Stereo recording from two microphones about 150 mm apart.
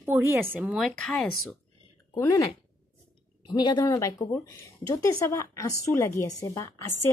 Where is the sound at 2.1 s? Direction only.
25° left (ahead or behind).